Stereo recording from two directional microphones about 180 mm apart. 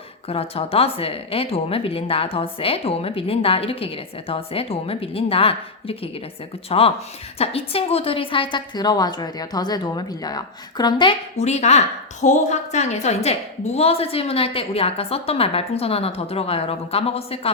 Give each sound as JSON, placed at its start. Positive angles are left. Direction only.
{"t": 0.3, "sound": "a woman's voice", "side_deg": 35}
{"t": 11.3, "sound": "speech", "side_deg": 40}